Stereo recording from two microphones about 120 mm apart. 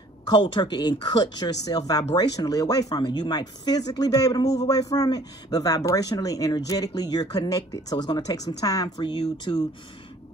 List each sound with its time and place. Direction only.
0.3 s speech: 35° left (ahead or behind)